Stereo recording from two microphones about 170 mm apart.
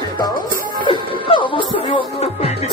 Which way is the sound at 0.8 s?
30° left (ahead or behind).